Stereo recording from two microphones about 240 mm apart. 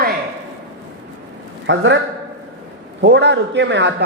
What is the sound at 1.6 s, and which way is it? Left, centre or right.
Speech, right.